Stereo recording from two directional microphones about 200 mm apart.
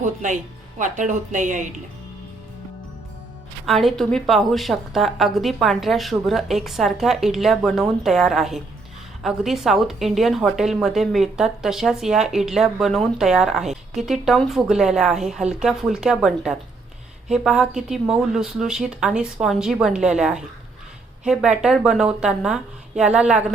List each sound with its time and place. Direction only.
0.0 s speech: 40° right (ahead or behind)
3.7 s speech: centre (ahead or behind)